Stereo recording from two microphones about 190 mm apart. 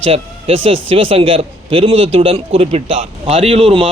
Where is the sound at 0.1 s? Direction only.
30° right (ahead or behind).